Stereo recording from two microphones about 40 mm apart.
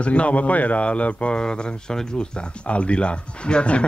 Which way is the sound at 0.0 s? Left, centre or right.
Left.